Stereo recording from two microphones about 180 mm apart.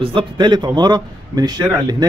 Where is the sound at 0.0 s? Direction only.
30° right (ahead or behind).